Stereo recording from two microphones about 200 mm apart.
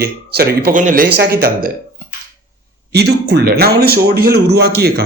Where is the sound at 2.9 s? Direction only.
55° right (ahead or behind).